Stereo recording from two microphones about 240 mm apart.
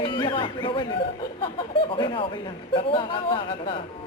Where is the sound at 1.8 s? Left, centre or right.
Left.